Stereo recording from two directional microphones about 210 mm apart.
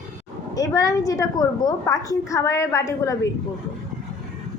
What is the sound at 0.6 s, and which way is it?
A woman's voice, 15° left (ahead or behind).